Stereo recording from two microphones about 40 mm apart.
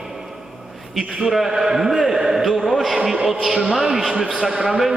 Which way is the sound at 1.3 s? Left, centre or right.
Centre.